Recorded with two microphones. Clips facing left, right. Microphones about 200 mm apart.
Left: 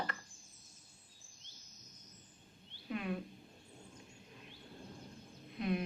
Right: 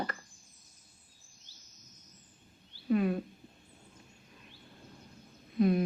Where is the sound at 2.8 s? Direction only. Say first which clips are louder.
Right 11 dB; 45° right (ahead or behind).